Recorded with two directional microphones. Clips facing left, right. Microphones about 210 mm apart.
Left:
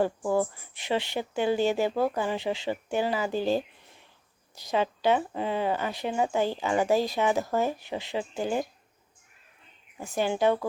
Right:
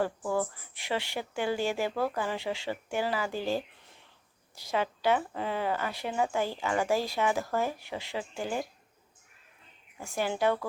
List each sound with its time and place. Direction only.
0.0 s speech: 20° left (ahead or behind)
10.0 s speech: 20° left (ahead or behind)